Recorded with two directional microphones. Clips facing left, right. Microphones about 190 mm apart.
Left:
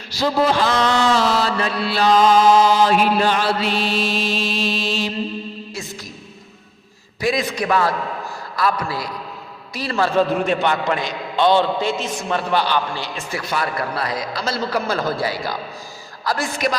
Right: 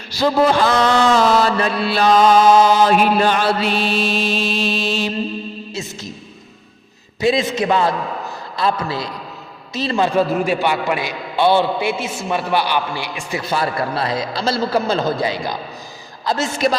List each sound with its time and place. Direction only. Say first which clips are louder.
0.2 s mantra: right 3 dB; 55° right (ahead or behind)
7.2 s a man's voice: right 4 dB; 25° right (ahead or behind)
10.3 s a man's voice: right 1 dB; 5° right (ahead or behind)
13.5 s a man's voice: right 3 dB; 30° right (ahead or behind)